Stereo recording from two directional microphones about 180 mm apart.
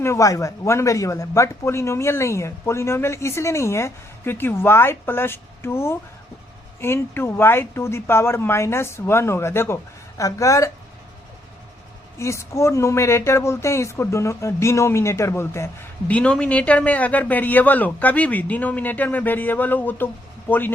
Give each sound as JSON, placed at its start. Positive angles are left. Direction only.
{"t": 0.0, "sound": "speech", "side_deg": 15}
{"t": 12.2, "sound": "speech", "side_deg": 15}